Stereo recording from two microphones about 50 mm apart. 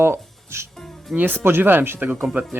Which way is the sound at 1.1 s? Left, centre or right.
Right.